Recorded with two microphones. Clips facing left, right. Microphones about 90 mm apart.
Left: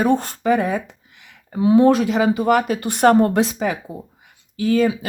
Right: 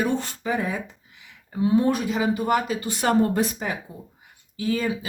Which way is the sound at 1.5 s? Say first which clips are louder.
Left 7 dB; 90° left.